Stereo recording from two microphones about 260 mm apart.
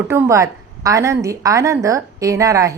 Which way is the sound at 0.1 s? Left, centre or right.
Centre.